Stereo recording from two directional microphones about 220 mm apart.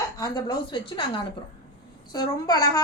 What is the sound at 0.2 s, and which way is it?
A woman's voice, 15° left (ahead or behind).